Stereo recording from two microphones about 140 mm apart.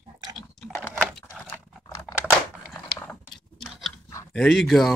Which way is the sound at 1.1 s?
5° left (ahead or behind).